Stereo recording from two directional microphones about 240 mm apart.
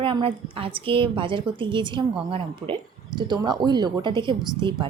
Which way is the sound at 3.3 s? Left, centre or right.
Centre.